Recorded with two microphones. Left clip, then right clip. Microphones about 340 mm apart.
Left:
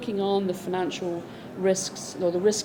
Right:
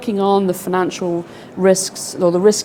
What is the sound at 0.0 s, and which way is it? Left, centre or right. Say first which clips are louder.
A woman's voice: right 10 dB; right.